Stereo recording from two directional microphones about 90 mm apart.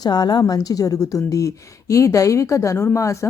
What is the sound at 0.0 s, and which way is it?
A woman's voice, 50° left (ahead or behind).